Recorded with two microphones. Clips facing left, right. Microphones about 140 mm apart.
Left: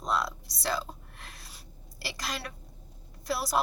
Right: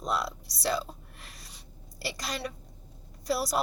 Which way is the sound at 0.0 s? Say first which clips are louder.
Left 1 dB; centre (ahead or behind).